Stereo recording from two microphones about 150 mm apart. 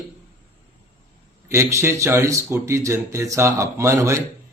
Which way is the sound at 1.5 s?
20° right (ahead or behind).